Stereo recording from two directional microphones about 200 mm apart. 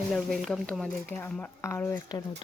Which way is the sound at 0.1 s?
Centre (ahead or behind).